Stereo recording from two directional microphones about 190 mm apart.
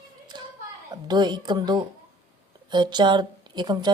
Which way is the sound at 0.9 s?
20° right (ahead or behind).